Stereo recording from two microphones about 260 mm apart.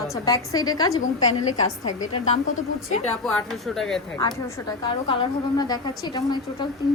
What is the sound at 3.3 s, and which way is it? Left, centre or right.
Speech, centre.